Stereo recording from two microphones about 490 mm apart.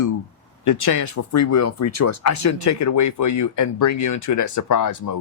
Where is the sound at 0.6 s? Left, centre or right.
Left.